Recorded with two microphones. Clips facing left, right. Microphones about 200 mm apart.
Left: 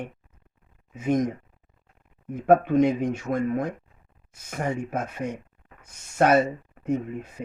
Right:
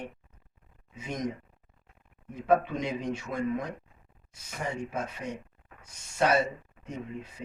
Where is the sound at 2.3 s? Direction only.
50° left (ahead or behind).